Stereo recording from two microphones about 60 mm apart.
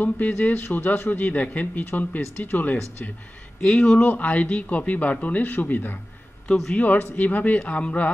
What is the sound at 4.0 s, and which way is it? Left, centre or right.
Speech, left.